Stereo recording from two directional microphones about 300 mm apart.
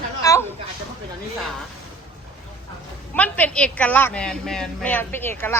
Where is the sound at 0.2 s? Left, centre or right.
Centre.